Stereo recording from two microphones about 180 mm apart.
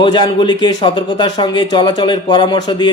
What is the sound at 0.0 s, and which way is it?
A man's voice, 25° left (ahead or behind).